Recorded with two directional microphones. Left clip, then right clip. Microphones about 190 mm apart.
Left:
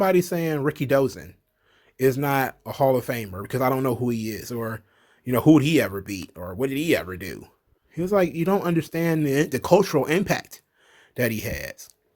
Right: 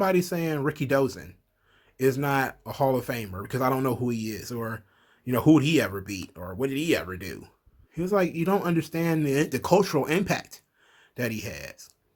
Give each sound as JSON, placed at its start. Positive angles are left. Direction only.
{"t": 0.0, "sound": "speech", "side_deg": 40}